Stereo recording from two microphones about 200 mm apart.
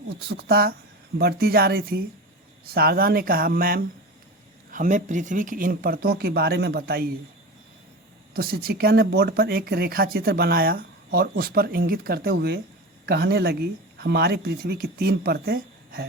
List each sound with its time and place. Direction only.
0.2 s speech: 55° right (ahead or behind)
8.3 s speech: 50° right (ahead or behind)